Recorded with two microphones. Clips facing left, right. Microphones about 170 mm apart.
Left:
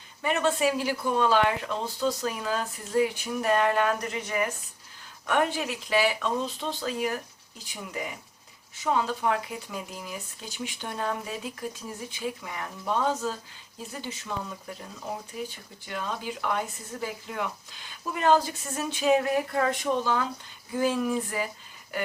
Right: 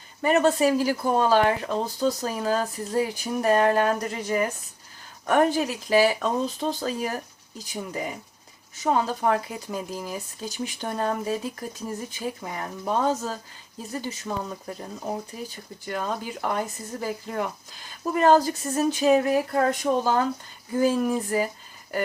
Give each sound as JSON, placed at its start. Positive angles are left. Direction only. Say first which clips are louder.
{"t": 0.2, "sound": "speech", "louder": "right 5 dB", "side_deg": -40}
{"t": 15.9, "sound": "speech", "louder": "right 4 dB", "side_deg": -40}